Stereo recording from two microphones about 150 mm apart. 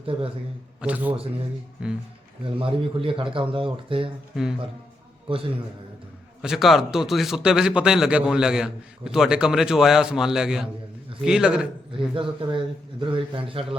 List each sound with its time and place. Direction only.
0.0 s a man's voice: 40° right (ahead or behind)
0.8 s a man's voice: 10° right (ahead or behind)
2.4 s speech: 35° right (ahead or behind)
5.3 s speech: 35° right (ahead or behind)
6.4 s a man's voice: centre (ahead or behind)
12.1 s speech: 35° right (ahead or behind)